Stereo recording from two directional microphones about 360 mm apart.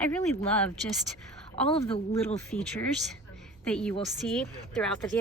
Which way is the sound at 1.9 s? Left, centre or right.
Centre.